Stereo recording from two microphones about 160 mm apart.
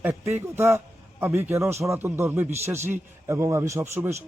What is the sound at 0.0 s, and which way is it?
A man's voice, 15° right (ahead or behind).